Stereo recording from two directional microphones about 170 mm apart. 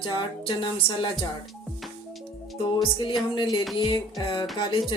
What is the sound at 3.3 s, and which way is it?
Speech, 25° left (ahead or behind).